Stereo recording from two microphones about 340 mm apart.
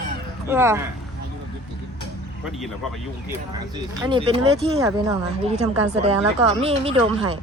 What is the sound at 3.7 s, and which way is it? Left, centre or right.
A woman's voice, centre.